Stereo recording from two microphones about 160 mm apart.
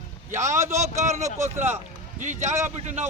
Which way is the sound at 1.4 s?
15° right (ahead or behind).